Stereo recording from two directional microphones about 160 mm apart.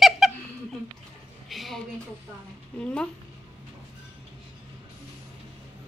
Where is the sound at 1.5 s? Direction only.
Centre (ahead or behind).